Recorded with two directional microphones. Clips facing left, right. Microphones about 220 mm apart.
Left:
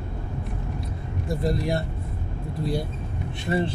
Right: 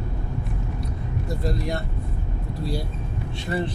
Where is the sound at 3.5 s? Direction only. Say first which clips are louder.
Left 2 dB; 25° left (ahead or behind).